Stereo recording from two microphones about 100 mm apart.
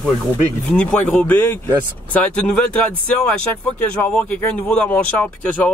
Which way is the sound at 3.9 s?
10° left (ahead or behind).